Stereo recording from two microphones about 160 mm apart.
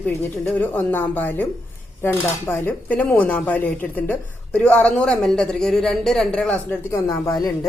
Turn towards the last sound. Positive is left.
turn(degrees=20)  # may be behind; listen again after turning